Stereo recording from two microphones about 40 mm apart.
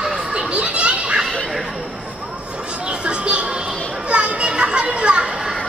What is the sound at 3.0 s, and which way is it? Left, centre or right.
Music, right.